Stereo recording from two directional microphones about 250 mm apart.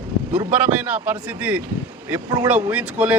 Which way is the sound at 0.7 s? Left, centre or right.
Centre.